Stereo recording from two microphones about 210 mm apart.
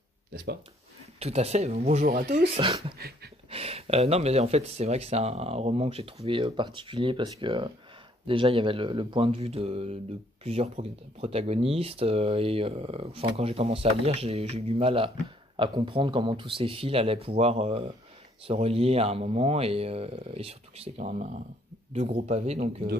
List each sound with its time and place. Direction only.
1.2 s speech: 30° right (ahead or behind)
3.0 s a sound: 50° right (ahead or behind)
3.4 s speech: 30° right (ahead or behind)